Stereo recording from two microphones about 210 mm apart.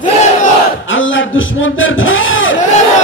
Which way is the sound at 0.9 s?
65° left (ahead or behind).